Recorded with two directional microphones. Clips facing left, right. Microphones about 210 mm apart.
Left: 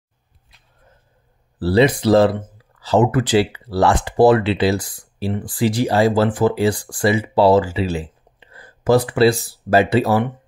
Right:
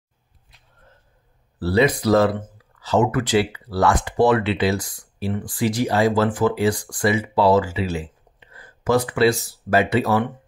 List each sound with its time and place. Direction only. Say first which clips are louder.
1.6 s speech: left 3 dB; 30° left (ahead or behind)